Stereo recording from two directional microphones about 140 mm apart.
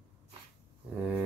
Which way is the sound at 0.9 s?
10° right (ahead or behind).